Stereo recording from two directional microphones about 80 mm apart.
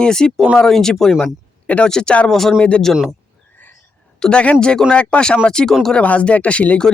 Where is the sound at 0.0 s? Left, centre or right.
Centre.